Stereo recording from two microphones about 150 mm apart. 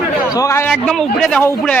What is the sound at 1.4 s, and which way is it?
Speech, 15° left (ahead or behind).